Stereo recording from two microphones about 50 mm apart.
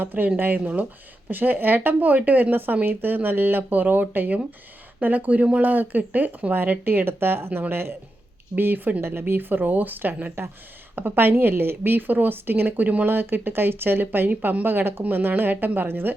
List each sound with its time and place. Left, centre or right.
0.0 s speech: right
5.6 s a woman's voice: right
8.5 s speech: right
9.0 s speech: right
10.4 s a woman's voice: right
13.1 s a woman's voice: right